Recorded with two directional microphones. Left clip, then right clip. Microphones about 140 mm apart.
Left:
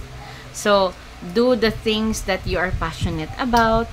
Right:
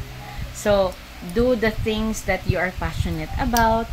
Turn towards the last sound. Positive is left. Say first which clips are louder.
# left 2 dB
turn(degrees=25)  # may be behind; listen again after turning